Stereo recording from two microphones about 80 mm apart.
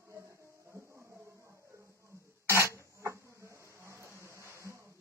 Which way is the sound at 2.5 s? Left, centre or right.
Right.